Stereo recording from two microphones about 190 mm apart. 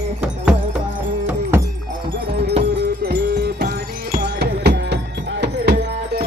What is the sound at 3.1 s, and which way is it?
Music, 60° right (ahead or behind).